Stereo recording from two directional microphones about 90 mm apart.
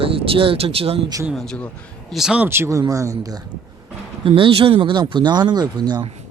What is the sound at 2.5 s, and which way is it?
Speech, 30° right (ahead or behind).